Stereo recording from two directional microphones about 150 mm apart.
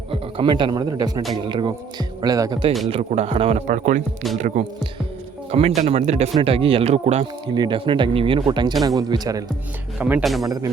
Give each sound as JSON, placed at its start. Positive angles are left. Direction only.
{"t": 0.1, "sound": "speech", "side_deg": -35}
{"t": 2.9, "sound": "speech", "side_deg": -45}
{"t": 3.7, "sound": "speech", "side_deg": -60}
{"t": 5.5, "sound": "speech", "side_deg": -45}
{"t": 7.4, "sound": "speech", "side_deg": -30}
{"t": 10.0, "sound": "speech", "side_deg": -10}